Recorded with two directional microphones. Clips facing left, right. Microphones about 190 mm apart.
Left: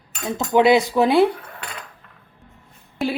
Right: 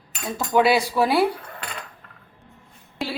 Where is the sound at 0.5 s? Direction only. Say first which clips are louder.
Left 3 dB; 20° left (ahead or behind).